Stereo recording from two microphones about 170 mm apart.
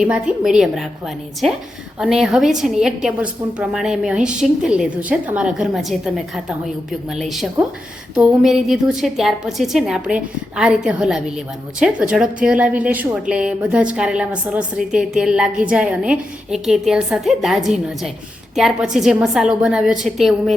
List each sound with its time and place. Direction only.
0.0 s a woman's voice: 5° right (ahead or behind)